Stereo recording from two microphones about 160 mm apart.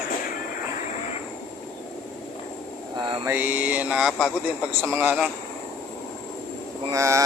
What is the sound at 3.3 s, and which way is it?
Speech, 10° right (ahead or behind).